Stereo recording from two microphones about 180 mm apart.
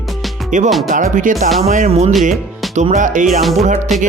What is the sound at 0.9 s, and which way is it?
Speech, 45° right (ahead or behind).